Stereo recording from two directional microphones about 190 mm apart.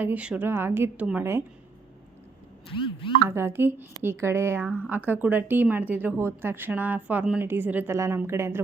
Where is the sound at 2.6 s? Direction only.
25° left (ahead or behind).